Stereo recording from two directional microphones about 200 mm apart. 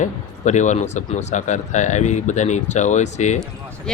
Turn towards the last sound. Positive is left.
turn(degrees=35)  # may be behind; listen again after turning